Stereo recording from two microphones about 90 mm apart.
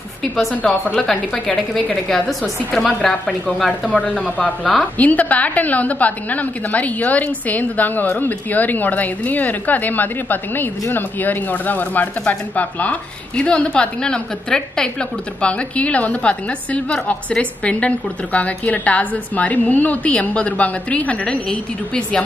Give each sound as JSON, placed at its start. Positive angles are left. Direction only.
{"t": 0.6, "sound": "speech", "side_deg": 15}
{"t": 1.3, "sound": "a woman's voice", "side_deg": 5}